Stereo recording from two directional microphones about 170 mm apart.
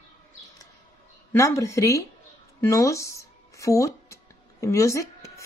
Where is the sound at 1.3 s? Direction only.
15° left (ahead or behind).